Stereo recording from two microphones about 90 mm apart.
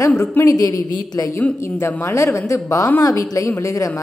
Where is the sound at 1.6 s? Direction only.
25° left (ahead or behind).